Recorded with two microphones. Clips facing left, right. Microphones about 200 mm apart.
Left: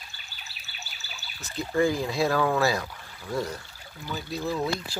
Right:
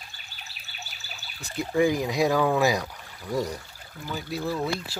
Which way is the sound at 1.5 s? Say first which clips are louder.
Right 2 dB; 15° right (ahead or behind).